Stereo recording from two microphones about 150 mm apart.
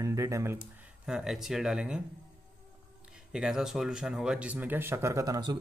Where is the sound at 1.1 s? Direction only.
5° right (ahead or behind).